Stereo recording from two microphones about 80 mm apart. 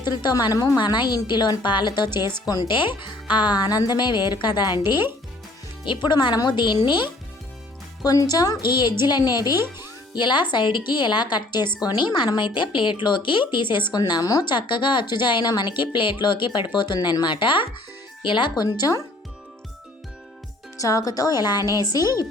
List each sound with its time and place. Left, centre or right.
0.0 s a woman's voice: left
0.8 s a woman's voice: left
2.6 s speech: left
3.3 s a woman's voice: left
5.8 s a woman's voice: left
8.0 s a woman's voice: left
9.6 s speech: right
10.2 s a woman's voice: left
11.9 s a woman's voice: left
14.1 s a woman's voice: left
14.4 s a woman's voice: left
16.7 s a woman's voice: left
20.7 s a woman's voice: left